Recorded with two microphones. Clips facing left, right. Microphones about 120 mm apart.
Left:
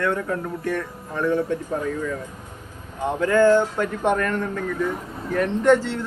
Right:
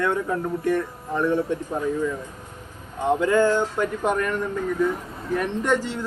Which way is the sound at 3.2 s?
15° right (ahead or behind).